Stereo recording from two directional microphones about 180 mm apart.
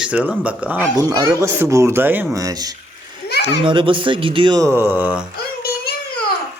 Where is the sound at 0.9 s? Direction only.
20° right (ahead or behind).